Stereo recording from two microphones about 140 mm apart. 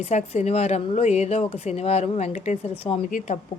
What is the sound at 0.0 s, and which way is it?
A woman's voice, 55° left (ahead or behind).